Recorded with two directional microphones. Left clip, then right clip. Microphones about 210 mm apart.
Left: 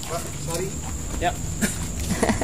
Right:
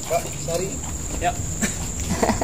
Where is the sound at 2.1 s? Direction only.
15° left (ahead or behind).